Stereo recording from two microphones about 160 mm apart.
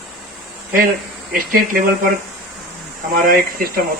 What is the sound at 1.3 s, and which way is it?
Speech, 60° right (ahead or behind).